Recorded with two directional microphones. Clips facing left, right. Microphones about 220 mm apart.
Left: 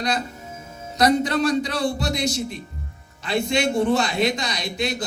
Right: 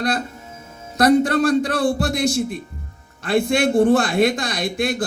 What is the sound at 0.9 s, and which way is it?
A man's voice, 55° right (ahead or behind).